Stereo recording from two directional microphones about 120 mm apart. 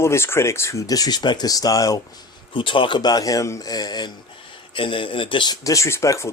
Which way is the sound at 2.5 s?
45° left (ahead or behind).